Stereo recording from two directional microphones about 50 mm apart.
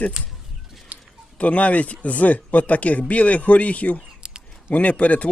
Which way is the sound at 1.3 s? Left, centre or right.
Left.